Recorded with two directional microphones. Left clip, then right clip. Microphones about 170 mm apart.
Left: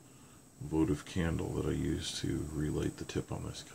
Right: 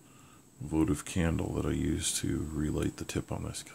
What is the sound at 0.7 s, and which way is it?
Speech, 50° right (ahead or behind).